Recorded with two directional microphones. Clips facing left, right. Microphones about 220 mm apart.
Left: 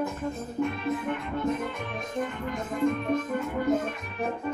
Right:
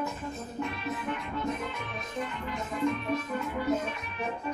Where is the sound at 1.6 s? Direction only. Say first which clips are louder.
Left 4 dB; 50° left (ahead or behind).